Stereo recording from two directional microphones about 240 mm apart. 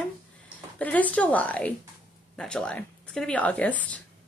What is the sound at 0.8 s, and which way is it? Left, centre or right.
Speech, centre.